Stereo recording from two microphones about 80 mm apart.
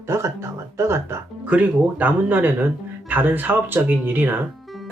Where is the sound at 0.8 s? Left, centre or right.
Right.